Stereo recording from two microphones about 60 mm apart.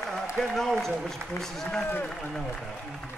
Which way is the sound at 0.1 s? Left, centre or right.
Centre.